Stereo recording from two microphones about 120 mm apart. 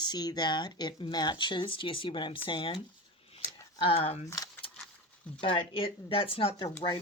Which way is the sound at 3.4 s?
45° left (ahead or behind).